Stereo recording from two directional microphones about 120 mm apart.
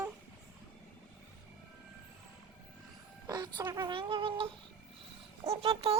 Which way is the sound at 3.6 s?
35° right (ahead or behind).